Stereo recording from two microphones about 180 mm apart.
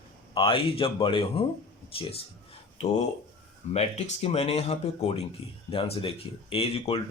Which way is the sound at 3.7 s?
35° left (ahead or behind).